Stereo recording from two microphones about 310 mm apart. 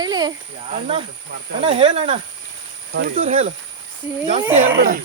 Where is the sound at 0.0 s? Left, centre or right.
Centre.